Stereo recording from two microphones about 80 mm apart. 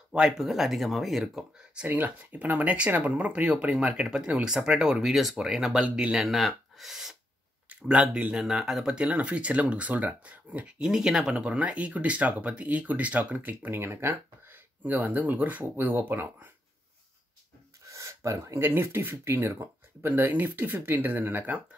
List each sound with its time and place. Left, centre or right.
0.4 s speech: centre
1.9 s speech: right
6.2 s speech: centre
10.8 s speech: centre; by 16.4 s right
17.8 s a sound: right
18.7 s speech: right